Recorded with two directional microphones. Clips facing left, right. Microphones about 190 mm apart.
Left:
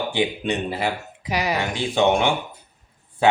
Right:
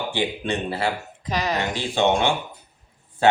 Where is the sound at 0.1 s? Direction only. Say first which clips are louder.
Left 2 dB; 15° left (ahead or behind).